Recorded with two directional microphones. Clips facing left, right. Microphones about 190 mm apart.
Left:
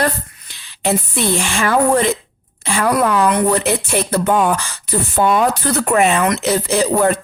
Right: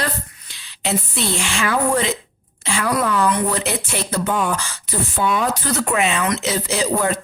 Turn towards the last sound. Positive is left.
turn(degrees=55)  # may be behind; listen again after turning